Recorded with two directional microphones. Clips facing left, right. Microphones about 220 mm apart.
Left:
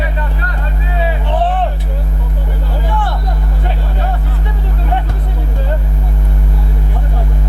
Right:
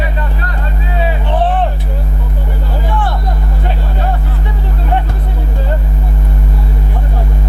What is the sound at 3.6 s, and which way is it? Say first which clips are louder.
Music: right 2 dB; 15° right (ahead or behind).